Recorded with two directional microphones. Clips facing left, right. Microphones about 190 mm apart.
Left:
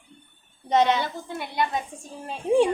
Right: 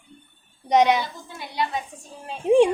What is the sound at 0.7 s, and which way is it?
Speech, 15° right (ahead or behind).